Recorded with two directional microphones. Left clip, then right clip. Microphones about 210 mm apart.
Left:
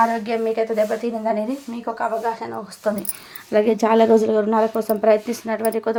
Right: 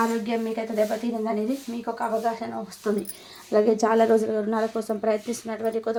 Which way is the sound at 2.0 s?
35° left (ahead or behind).